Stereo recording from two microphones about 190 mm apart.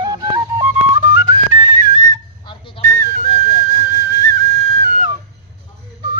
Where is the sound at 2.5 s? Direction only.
25° left (ahead or behind).